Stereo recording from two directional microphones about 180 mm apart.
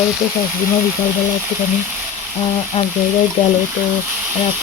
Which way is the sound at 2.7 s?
30° left (ahead or behind).